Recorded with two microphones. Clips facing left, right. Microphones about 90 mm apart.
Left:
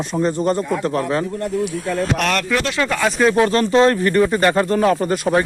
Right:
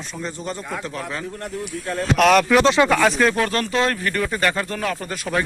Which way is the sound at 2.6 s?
20° right (ahead or behind).